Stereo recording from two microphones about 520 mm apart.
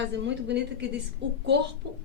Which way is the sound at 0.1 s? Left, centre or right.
Centre.